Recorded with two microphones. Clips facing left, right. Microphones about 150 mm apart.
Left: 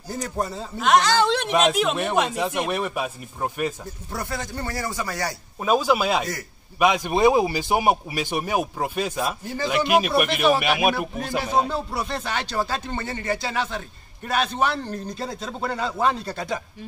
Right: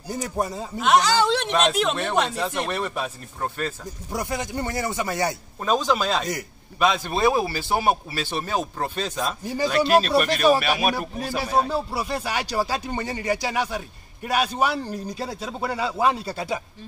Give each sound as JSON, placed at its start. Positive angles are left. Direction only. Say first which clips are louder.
{"t": 0.1, "sound": "speech", "louder": "right 1 dB", "side_deg": -15}
{"t": 0.7, "sound": "speech", "louder": "even", "side_deg": 0}
{"t": 4.1, "sound": "speech", "louder": "right 3 dB", "side_deg": -15}
{"t": 5.6, "sound": "speech", "louder": "left 2 dB", "side_deg": 10}
{"t": 9.4, "sound": "speech", "louder": "right 3 dB", "side_deg": -15}
{"t": 9.7, "sound": "speech", "louder": "right 1 dB", "side_deg": 15}
{"t": 11.7, "sound": "speech", "louder": "right 1 dB", "side_deg": -5}